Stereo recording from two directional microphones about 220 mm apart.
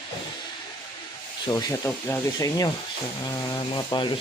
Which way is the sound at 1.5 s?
15° left (ahead or behind).